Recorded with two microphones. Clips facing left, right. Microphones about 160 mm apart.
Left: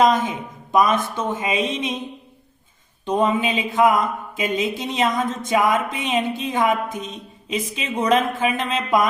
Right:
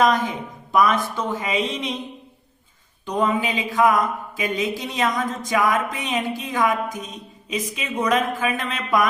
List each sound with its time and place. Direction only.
0.0 s speech: 20° left (ahead or behind)
3.1 s speech: 25° left (ahead or behind)